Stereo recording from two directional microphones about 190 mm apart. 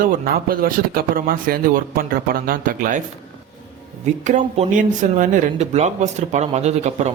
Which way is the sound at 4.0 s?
40° right (ahead or behind).